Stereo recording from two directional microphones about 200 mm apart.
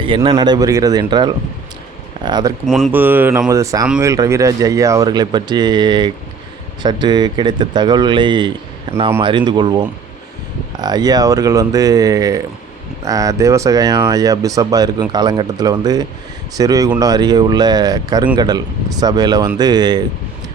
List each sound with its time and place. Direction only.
0.0 s speech: 25° right (ahead or behind)
2.6 s speech: centre (ahead or behind)
2.9 s speech: 10° right (ahead or behind)